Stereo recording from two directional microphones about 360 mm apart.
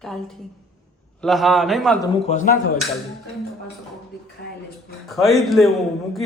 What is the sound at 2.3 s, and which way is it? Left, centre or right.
Speech, left.